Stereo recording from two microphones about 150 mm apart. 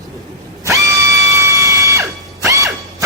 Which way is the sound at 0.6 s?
20° right (ahead or behind).